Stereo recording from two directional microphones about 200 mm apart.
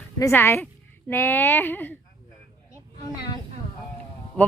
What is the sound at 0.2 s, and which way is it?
Speech, 10° left (ahead or behind).